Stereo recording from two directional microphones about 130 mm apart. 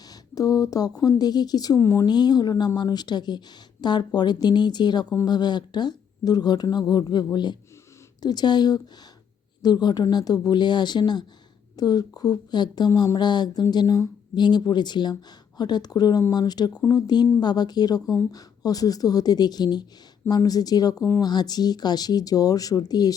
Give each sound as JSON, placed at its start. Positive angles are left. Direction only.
{"t": 0.1, "sound": "a woman's voice", "side_deg": 25}